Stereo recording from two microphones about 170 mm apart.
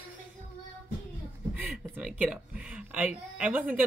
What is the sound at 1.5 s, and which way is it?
Speech, 10° right (ahead or behind).